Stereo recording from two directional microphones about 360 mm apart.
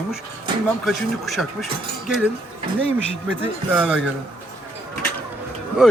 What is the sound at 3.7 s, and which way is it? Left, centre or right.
Speech, centre.